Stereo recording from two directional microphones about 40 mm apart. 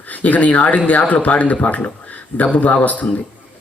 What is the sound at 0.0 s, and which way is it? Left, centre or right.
Speech, left.